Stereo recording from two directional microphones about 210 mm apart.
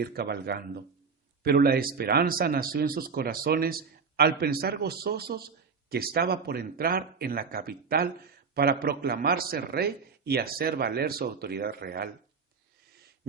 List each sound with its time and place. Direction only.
0.0 s speech: 50° right (ahead or behind)